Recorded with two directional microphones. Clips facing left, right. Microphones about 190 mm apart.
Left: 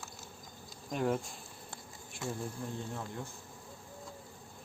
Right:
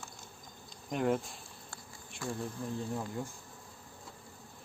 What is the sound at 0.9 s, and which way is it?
Bee, 5° right (ahead or behind).